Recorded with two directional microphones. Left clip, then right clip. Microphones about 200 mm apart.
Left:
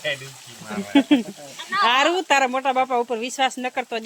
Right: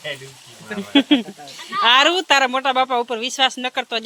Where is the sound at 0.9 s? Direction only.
10° right (ahead or behind).